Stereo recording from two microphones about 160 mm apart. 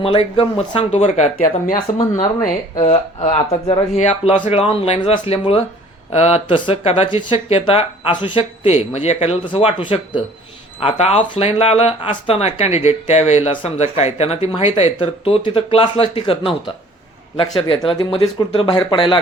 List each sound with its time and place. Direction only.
0.0 s speech: 35° left (ahead or behind)
2.8 s speech: 40° left (ahead or behind)